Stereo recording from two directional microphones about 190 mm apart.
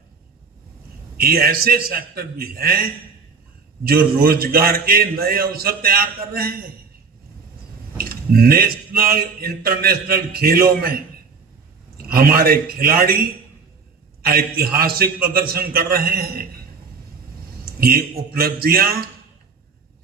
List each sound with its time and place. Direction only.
1.1 s a man's voice: 50° right (ahead or behind)
3.8 s a man's voice: 50° right (ahead or behind)
7.9 s a sound: 50° right (ahead or behind)
9.0 s a man's voice: 50° right (ahead or behind)
17.7 s a man's voice: 50° right (ahead or behind)